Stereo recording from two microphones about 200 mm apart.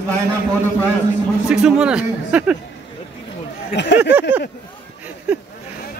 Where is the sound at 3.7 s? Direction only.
60° left (ahead or behind).